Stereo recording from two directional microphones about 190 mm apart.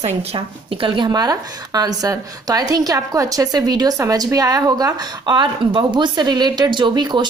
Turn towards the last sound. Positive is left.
turn(degrees=-25)  # may be behind; listen again after turning